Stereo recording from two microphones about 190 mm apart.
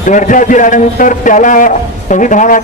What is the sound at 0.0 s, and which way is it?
A man's voice, 40° left (ahead or behind).